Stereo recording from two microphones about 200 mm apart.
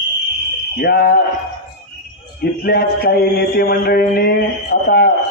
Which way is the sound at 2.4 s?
50° left (ahead or behind).